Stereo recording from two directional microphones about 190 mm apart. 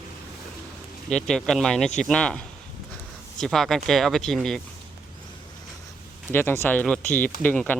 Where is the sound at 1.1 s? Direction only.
5° left (ahead or behind).